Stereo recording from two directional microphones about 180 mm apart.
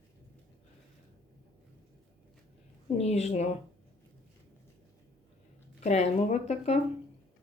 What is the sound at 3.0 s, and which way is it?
Speech, 35° left (ahead or behind).